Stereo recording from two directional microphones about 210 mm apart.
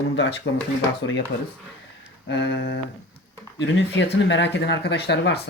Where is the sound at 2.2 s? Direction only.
55° left (ahead or behind).